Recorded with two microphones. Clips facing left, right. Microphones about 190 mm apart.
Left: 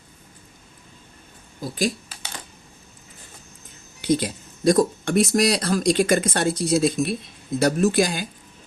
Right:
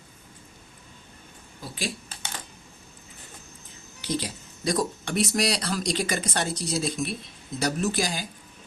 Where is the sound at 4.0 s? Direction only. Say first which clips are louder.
Left 8 dB; 50° left (ahead or behind).